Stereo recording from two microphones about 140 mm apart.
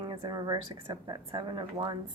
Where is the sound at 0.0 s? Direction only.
30° right (ahead or behind).